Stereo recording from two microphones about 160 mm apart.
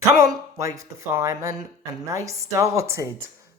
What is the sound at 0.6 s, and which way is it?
Speech, 20° right (ahead or behind).